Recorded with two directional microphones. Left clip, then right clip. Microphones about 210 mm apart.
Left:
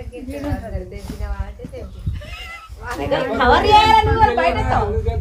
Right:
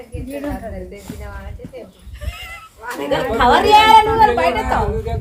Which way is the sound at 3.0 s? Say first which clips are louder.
Right 1 dB; 45° right (ahead or behind).